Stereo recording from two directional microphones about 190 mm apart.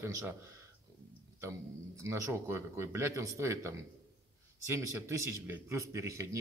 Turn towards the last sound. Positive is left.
turn(degrees=-15)  # may be behind; listen again after turning